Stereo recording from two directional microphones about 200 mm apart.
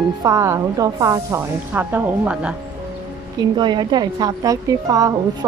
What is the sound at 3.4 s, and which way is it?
A woman's voice, 20° right (ahead or behind).